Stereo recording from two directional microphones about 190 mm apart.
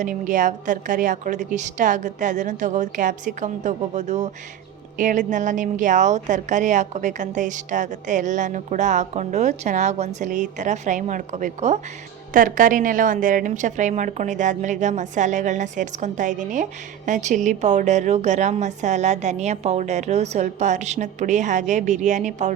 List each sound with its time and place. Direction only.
0.0 s a woman's voice: 45° right (ahead or behind)